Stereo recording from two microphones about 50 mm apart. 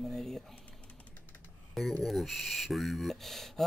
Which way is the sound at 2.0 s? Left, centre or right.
Centre.